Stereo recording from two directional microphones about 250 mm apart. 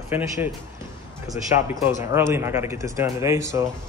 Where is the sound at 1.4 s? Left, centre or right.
Centre.